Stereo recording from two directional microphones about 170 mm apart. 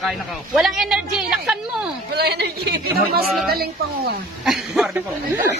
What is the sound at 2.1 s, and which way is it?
Speech, 75° right (ahead or behind).